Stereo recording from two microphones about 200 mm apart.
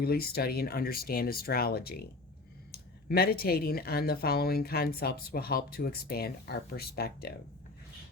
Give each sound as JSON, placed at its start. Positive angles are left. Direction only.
{"t": 0.0, "sound": "speech", "side_deg": 50}